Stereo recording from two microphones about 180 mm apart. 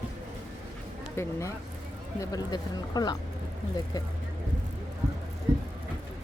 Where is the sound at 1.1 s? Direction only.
15° left (ahead or behind).